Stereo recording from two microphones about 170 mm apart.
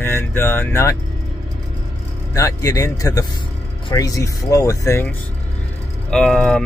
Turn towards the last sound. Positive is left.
turn(degrees=5)  # may be behind; listen again after turning